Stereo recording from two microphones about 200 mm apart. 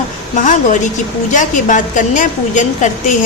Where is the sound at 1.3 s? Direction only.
40° left (ahead or behind).